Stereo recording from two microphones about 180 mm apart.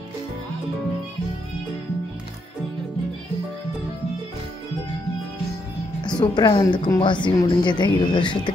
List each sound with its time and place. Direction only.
6.1 s a woman's voice: 25° left (ahead or behind)